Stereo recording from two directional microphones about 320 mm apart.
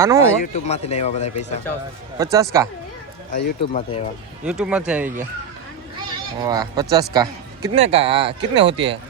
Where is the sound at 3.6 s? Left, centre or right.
Centre.